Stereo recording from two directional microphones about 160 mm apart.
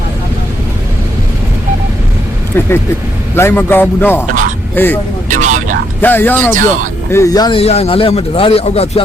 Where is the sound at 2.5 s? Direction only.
15° left (ahead or behind).